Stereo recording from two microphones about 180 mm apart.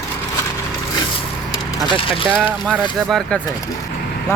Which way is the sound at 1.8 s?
30° left (ahead or behind).